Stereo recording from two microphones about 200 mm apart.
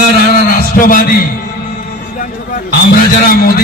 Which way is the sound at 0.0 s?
45° left (ahead or behind).